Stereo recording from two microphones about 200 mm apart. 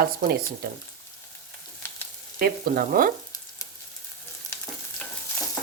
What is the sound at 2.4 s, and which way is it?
Speech, 45° right (ahead or behind).